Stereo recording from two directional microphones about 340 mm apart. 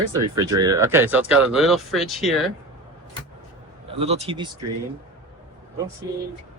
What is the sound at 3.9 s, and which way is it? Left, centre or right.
Speech, centre.